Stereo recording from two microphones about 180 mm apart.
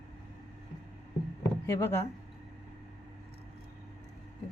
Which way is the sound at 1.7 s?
15° left (ahead or behind).